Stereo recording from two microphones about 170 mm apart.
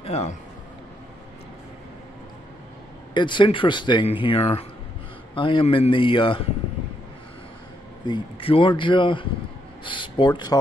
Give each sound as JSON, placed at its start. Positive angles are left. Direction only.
{"t": 0.0, "sound": "a man's voice", "side_deg": 35}
{"t": 3.2, "sound": "speech", "side_deg": 30}
{"t": 8.0, "sound": "speech", "side_deg": 30}